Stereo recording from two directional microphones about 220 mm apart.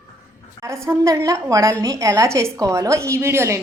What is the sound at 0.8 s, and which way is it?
A woman's voice, 15° right (ahead or behind).